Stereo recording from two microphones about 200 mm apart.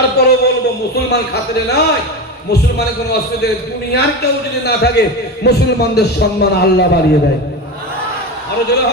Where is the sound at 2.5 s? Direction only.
55° left (ahead or behind).